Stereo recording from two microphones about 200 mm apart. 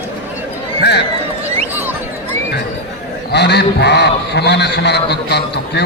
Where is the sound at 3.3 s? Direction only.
55° left (ahead or behind).